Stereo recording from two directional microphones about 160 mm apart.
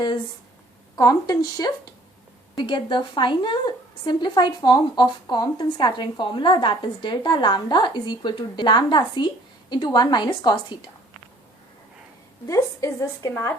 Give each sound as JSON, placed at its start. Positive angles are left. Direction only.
{"t": 0.9, "sound": "a woman's voice", "side_deg": 20}
{"t": 12.5, "sound": "a woman's voice", "side_deg": 20}